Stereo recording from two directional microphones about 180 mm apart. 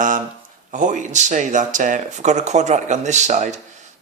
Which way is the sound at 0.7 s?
45° right (ahead or behind).